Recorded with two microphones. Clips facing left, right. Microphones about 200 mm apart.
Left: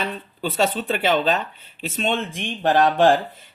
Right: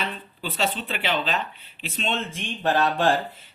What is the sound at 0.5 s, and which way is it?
Speech, 45° left (ahead or behind).